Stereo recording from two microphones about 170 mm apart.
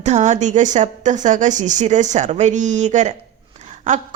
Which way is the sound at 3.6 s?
45° right (ahead or behind).